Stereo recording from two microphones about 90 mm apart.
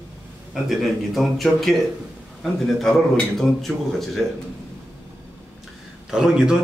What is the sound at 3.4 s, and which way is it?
Speech, 5° left (ahead or behind).